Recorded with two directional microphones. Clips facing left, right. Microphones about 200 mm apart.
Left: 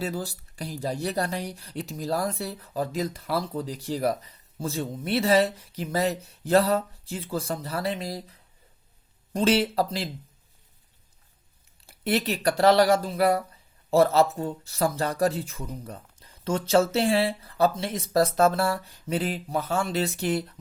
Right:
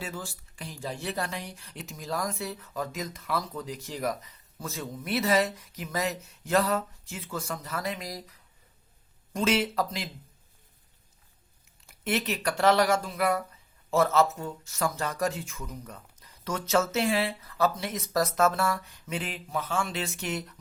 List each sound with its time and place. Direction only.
0.0 s speech: 35° left (ahead or behind)
11.9 s speech: 35° left (ahead or behind)